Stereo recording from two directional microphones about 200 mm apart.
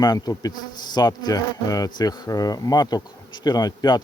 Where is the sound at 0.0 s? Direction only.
20° left (ahead or behind).